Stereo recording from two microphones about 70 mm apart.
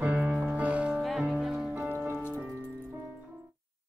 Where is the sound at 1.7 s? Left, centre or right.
Right.